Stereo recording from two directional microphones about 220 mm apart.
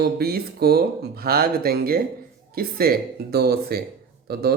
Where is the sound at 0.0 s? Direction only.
45° right (ahead or behind).